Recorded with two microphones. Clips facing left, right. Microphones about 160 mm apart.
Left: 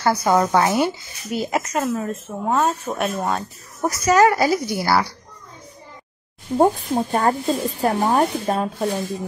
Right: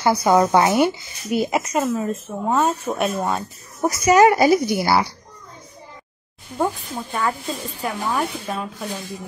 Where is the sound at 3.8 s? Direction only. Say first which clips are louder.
Right 2 dB; 15° right (ahead or behind).